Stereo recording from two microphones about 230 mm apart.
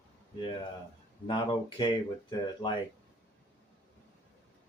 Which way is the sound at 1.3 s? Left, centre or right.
Left.